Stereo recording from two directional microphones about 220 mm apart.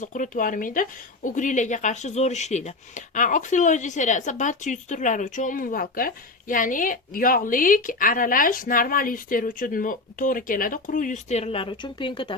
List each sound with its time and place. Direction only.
0.0 s speech: 35° left (ahead or behind)